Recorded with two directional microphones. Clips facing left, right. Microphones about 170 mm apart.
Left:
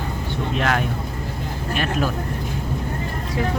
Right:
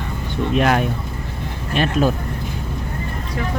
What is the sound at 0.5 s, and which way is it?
Speech, 15° right (ahead or behind).